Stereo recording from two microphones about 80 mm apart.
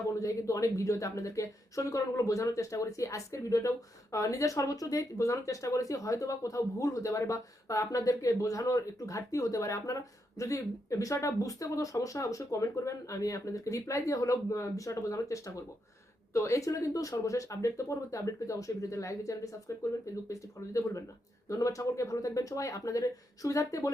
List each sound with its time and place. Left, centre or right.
0.1 s speech: left